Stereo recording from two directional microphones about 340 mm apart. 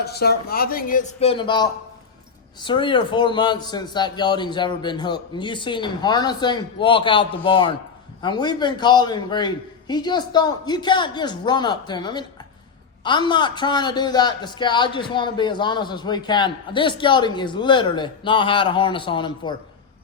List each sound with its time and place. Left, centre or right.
0.0 s speech: left
2.6 s a man's voice: centre